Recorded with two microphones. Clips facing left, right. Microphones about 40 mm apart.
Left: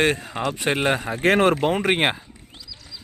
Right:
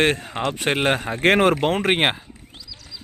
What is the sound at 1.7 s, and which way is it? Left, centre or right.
Speech, right.